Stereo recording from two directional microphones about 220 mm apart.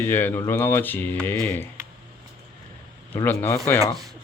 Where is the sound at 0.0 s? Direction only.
10° left (ahead or behind).